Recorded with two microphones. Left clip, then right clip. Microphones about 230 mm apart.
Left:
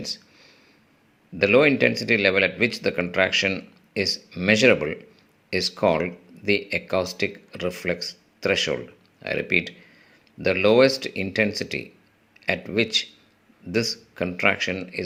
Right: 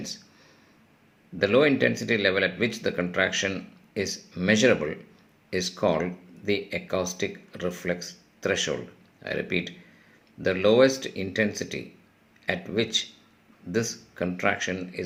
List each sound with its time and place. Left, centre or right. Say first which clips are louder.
1.4 s speech: left 4 dB; left